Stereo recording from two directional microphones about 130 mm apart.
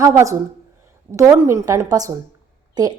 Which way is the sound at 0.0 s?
25° right (ahead or behind).